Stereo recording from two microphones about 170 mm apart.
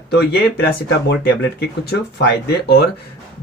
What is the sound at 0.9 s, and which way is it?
Speech, 85° left.